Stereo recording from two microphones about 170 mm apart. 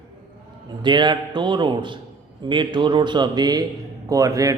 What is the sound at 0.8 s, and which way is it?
Speech, 25° right (ahead or behind).